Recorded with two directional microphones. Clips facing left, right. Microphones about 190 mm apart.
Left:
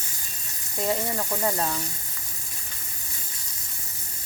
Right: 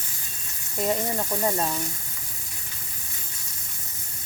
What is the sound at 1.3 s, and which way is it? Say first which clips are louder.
Speech: even; 15° right (ahead or behind).